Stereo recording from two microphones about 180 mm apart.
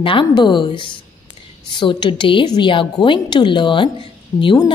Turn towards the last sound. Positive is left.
turn(degrees=25)  # may be behind; listen again after turning